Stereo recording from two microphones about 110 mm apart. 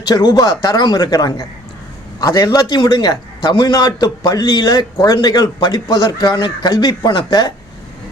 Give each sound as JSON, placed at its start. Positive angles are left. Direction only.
{"t": 0.0, "sound": "a man's voice", "side_deg": 35}